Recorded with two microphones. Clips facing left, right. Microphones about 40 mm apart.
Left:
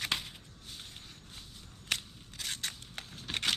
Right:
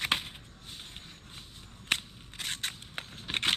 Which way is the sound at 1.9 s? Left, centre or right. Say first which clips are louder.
Right 4 dB; right.